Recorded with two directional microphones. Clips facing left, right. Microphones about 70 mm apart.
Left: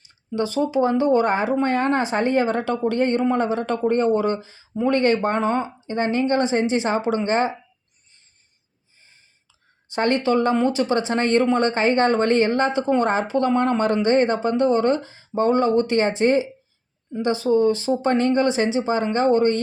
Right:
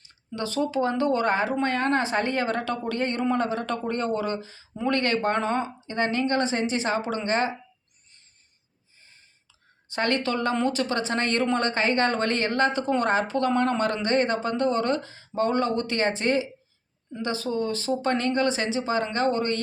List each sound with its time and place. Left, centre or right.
0.3 s speech: centre
9.9 s speech: left